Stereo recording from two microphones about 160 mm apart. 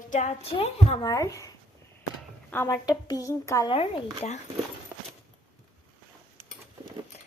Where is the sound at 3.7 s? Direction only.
40° left (ahead or behind).